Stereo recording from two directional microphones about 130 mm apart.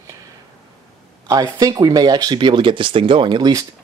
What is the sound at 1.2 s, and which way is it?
Speech, 30° right (ahead or behind).